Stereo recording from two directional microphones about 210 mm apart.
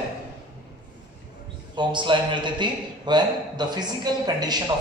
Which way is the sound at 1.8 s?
20° right (ahead or behind).